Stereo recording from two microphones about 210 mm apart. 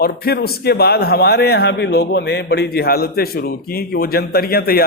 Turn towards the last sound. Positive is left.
turn(degrees=45)  # may be behind; listen again after turning